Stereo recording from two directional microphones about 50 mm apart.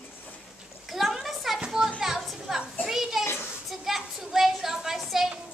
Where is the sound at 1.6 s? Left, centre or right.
Centre.